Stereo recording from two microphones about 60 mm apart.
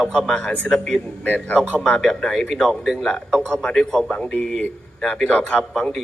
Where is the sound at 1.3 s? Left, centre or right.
Left.